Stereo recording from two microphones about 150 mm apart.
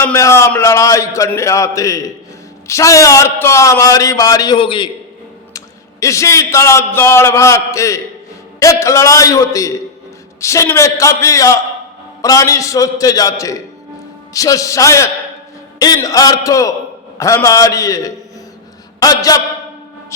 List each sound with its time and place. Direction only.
0.0 s a man's voice: 15° left (ahead or behind); by 4.9 s 35° left (ahead or behind)
5.5 s a man's voice: 20° left (ahead or behind)